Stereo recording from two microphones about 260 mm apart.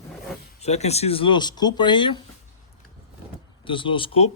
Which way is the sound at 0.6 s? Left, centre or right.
Left.